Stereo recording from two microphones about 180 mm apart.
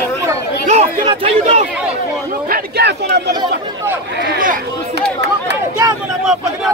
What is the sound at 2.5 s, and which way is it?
Speech, 65° right (ahead or behind).